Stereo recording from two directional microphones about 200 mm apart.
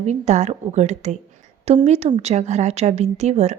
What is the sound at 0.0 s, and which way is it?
A woman's voice, 35° right (ahead or behind).